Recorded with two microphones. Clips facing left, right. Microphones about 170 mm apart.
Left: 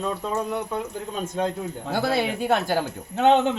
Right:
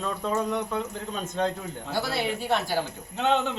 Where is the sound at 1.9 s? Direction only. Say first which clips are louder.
Left 4 dB; 55° left (ahead or behind).